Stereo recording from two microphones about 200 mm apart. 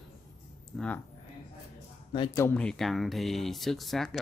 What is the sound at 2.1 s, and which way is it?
Speech, 25° left (ahead or behind).